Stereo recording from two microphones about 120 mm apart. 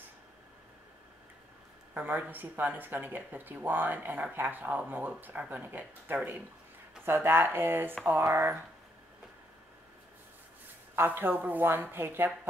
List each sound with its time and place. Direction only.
2.0 s speech: 15° right (ahead or behind)
11.0 s speech: 15° right (ahead or behind)